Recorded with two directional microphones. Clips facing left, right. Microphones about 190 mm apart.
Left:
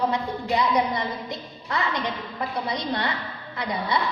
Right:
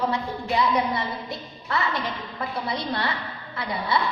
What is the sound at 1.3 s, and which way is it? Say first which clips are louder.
A woman's voice: right 1 dB; 20° left (ahead or behind).